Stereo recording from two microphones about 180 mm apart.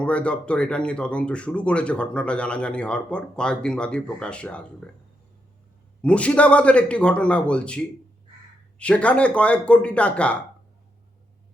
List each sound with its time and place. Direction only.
0.0 s speech: 5° left (ahead or behind)
6.0 s speech: 5° left (ahead or behind)